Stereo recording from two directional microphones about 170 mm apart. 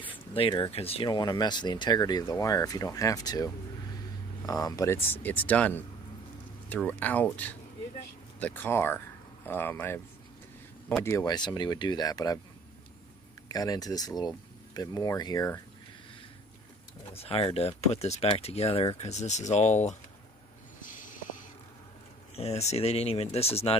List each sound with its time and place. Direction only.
0.0 s speech: 30° left (ahead or behind)
13.5 s speech: 20° left (ahead or behind)
17.2 s speech: 35° left (ahead or behind)
20.8 s a sound: 50° left (ahead or behind)
22.4 s speech: 40° left (ahead or behind)